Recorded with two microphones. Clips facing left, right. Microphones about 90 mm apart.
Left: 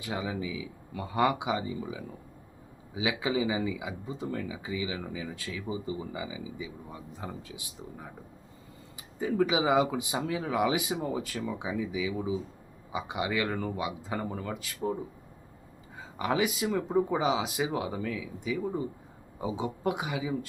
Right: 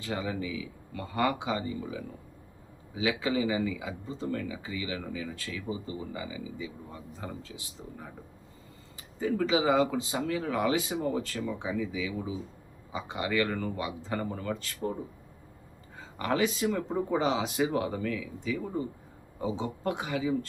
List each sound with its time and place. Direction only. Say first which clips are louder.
0.0 s speech: even; 10° left (ahead or behind)
16.0 s speech: even; 10° left (ahead or behind)